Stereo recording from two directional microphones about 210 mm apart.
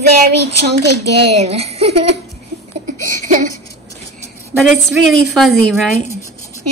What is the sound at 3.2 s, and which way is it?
Speech, 40° right (ahead or behind).